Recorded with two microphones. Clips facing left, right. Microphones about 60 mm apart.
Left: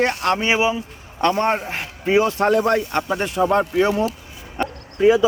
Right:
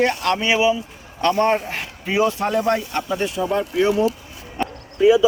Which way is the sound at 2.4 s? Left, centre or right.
Left.